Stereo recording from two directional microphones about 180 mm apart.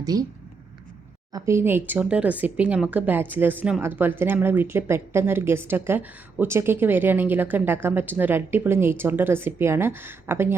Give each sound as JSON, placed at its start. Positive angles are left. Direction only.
{"t": 0.0, "sound": "speech", "side_deg": -20}
{"t": 1.3, "sound": "a woman's voice", "side_deg": -15}